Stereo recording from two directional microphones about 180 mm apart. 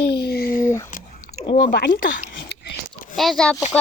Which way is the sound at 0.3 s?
55° left (ahead or behind).